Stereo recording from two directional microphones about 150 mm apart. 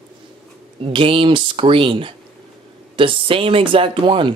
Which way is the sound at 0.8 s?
35° right (ahead or behind).